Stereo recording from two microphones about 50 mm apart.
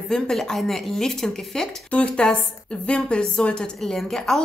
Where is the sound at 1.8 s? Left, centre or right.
Left.